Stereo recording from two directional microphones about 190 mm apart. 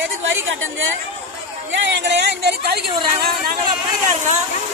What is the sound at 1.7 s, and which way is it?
Speech, 60° right (ahead or behind).